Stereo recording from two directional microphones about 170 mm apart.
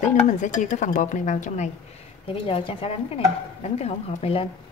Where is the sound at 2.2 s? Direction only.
35° left (ahead or behind).